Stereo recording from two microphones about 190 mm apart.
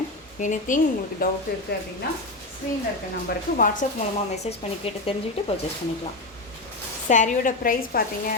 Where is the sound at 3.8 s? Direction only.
40° left (ahead or behind).